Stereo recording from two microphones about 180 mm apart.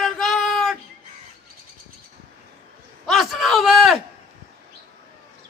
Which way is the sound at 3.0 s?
Centre (ahead or behind).